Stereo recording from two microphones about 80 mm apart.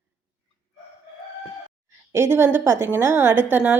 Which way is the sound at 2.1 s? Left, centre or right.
Right.